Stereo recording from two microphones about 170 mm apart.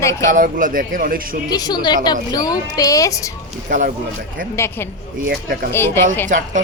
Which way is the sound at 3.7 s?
50° right (ahead or behind).